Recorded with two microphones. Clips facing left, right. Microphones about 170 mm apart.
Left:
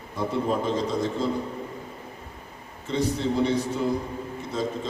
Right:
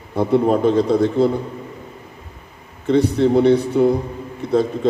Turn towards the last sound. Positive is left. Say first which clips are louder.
# right 12 dB
turn(degrees=-60)  # may be behind; listen again after turning